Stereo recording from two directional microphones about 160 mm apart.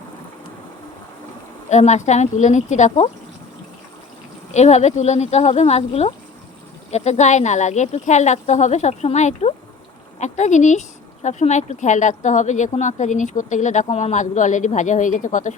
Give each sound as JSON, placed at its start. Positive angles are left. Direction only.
{"t": 1.7, "sound": "speech", "side_deg": 45}
{"t": 4.5, "sound": "speech", "side_deg": 45}